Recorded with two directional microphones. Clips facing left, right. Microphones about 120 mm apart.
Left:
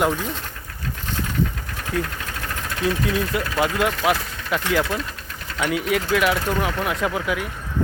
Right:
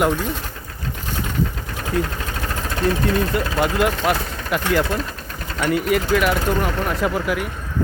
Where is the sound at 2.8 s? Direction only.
40° right (ahead or behind).